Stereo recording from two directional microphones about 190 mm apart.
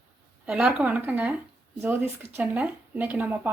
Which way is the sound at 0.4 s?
5° right (ahead or behind).